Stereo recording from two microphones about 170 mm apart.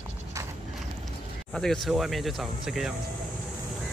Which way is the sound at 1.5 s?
Centre (ahead or behind).